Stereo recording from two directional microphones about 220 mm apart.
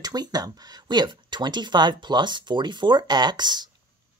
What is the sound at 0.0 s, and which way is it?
Speech, 20° right (ahead or behind).